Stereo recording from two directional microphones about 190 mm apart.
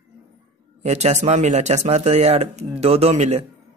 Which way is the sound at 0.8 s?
35° right (ahead or behind).